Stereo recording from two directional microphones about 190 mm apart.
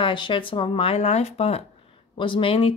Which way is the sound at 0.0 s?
25° left (ahead or behind).